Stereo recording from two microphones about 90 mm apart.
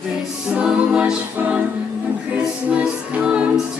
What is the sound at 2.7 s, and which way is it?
Music, 15° right (ahead or behind).